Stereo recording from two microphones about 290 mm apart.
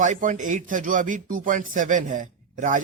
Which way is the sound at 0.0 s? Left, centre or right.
Right.